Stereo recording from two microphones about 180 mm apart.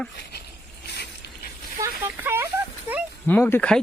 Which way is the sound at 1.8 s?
10° right (ahead or behind).